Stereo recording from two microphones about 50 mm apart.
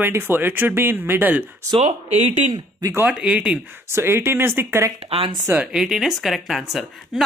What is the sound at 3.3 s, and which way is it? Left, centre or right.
Speech, right.